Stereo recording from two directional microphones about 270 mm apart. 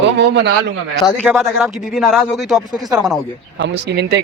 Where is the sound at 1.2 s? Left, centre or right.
Centre.